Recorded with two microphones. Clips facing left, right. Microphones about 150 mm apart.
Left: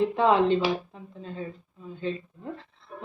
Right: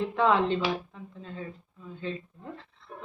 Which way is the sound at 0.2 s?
15° left (ahead or behind).